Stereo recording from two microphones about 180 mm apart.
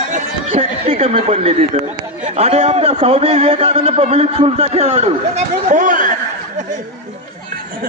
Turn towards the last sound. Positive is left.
turn(degrees=-45)  # may be behind; listen again after turning